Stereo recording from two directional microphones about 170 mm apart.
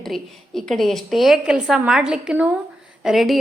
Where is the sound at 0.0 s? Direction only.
Centre (ahead or behind).